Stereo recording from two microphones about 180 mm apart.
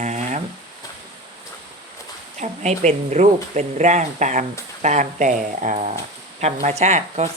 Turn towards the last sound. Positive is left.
turn(degrees=-40)  # may be behind; listen again after turning